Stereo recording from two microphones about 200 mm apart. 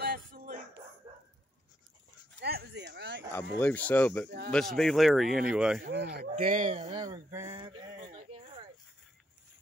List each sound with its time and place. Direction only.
0.0 s music: 45° right (ahead or behind)
2.4 s a sound: 55° right (ahead or behind)
3.3 s speech: 10° left (ahead or behind)
6.0 s speech: 40° right (ahead or behind)
7.0 s speech: 15° right (ahead or behind)
7.5 s a sound: 25° right (ahead or behind)